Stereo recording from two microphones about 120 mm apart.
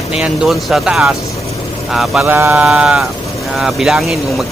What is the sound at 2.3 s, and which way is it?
Speech, 15° right (ahead or behind).